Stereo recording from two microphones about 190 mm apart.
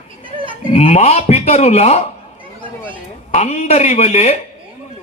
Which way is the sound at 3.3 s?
35° left (ahead or behind).